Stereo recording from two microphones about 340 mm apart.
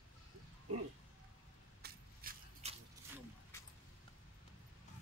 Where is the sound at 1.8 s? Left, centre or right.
Right.